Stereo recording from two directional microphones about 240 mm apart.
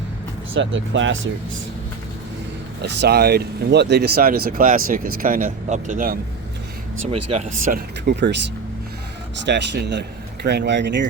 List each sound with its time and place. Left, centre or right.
0.5 s speech: right
2.8 s speech: right
7.6 s speech: right
9.4 s speech: right